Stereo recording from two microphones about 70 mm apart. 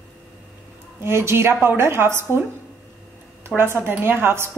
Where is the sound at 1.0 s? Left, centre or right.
Right.